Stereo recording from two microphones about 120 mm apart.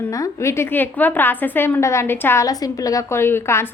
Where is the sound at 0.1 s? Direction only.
25° left (ahead or behind).